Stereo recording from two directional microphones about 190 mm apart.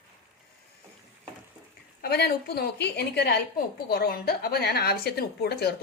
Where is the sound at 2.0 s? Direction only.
55° left (ahead or behind).